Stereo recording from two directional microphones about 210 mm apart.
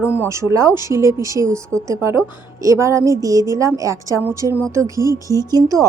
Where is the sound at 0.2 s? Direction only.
15° right (ahead or behind).